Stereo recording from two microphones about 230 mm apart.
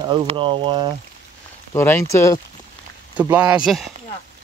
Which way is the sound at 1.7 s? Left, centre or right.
Centre.